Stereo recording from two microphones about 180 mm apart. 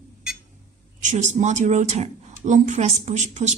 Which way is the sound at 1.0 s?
40° right (ahead or behind).